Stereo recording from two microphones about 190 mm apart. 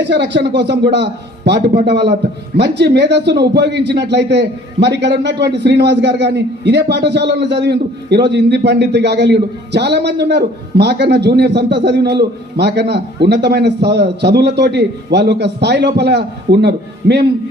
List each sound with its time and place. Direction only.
0.0 s a man's voice: 65° right (ahead or behind)